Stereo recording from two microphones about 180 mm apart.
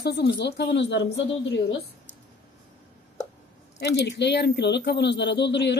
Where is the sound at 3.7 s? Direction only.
75° left (ahead or behind).